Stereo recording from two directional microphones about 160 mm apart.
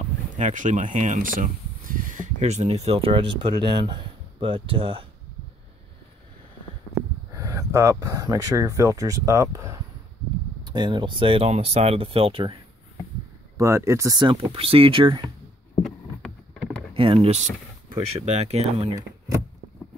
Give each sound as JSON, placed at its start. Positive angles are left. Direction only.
{"t": 0.4, "sound": "speech", "side_deg": -50}
{"t": 7.3, "sound": "speech", "side_deg": -20}
{"t": 13.6, "sound": "speech", "side_deg": -20}
{"t": 14.2, "sound": "speech", "side_deg": -35}
{"t": 15.8, "sound": "rowboat", "side_deg": 5}
{"t": 16.9, "sound": "speech", "side_deg": -35}